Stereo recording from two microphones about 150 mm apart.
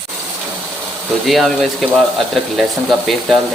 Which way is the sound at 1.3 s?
Centre (ahead or behind).